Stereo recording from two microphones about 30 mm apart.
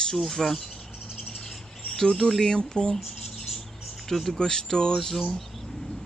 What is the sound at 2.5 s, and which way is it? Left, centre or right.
Speech, left.